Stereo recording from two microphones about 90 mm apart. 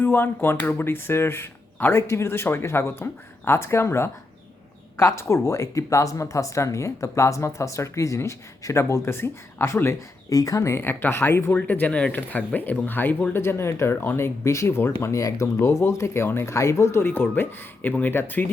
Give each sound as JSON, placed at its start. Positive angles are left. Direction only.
{"t": 0.0, "sound": "speech", "side_deg": 25}
{"t": 10.3, "sound": "speech", "side_deg": 40}